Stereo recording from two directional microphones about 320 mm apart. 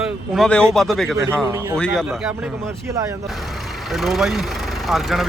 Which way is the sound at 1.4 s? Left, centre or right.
Centre.